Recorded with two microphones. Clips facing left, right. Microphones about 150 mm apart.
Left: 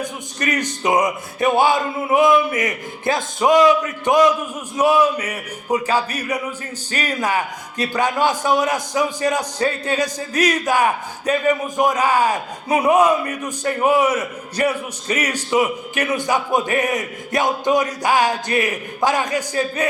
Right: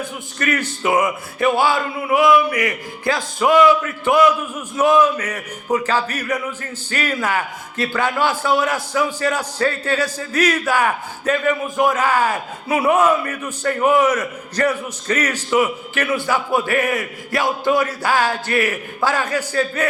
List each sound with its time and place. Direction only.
0.0 s a man's voice: 15° left (ahead or behind)